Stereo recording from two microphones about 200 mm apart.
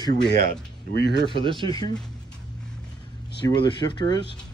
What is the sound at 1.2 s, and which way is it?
Speech, 25° right (ahead or behind).